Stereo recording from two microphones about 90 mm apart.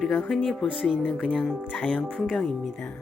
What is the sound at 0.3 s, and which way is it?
Speech, 5° left (ahead or behind).